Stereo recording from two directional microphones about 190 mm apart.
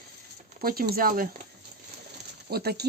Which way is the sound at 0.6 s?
50° right (ahead or behind).